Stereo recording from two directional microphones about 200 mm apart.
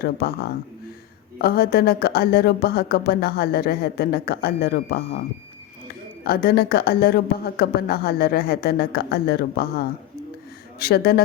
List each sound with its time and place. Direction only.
0.0 s speech: 50° left (ahead or behind)
6.2 s speech: 50° left (ahead or behind)